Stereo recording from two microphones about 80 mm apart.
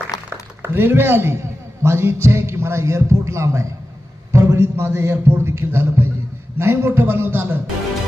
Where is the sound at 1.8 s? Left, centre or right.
Right.